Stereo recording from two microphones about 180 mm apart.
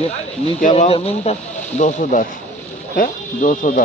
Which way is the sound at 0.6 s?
40° left (ahead or behind).